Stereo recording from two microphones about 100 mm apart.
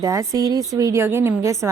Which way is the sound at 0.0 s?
30° right (ahead or behind).